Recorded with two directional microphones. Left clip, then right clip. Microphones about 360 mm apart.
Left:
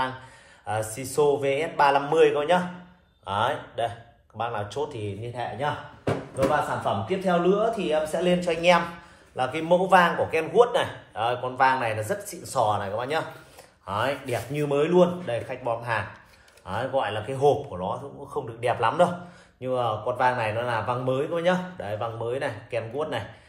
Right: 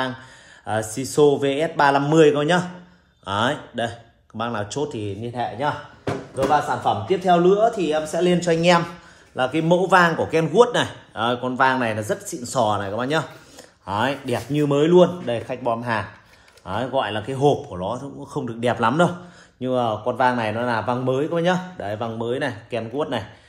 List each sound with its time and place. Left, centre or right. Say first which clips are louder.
0.7 s a man's voice: right 4 dB; right